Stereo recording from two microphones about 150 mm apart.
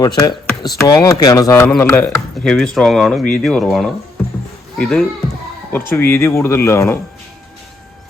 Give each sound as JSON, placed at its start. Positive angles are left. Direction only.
{"t": 0.0, "sound": "speech", "side_deg": 25}
{"t": 2.4, "sound": "speech", "side_deg": 5}